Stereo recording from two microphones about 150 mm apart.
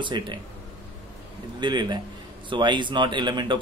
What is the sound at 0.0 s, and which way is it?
Speech, 30° right (ahead or behind).